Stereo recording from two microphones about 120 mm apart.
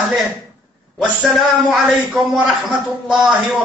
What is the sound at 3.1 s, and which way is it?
Speech, 5° right (ahead or behind).